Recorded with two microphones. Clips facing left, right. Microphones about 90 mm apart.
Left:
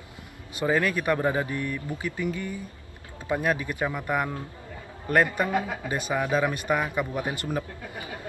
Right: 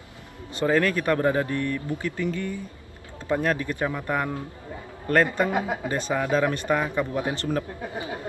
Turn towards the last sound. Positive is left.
turn(degrees=10)  # may be behind; listen again after turning